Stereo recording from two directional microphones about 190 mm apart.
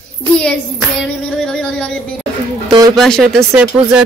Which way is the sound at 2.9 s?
Centre (ahead or behind).